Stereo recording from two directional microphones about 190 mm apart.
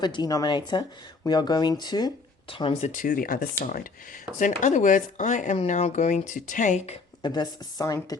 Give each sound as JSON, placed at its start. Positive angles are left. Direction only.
{"t": 0.0, "sound": "speech", "side_deg": 20}
{"t": 2.9, "sound": "speech", "side_deg": 45}
{"t": 7.2, "sound": "speech", "side_deg": 20}